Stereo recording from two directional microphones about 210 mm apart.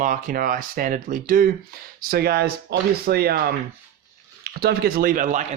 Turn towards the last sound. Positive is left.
turn(degrees=-35)  # may be behind; listen again after turning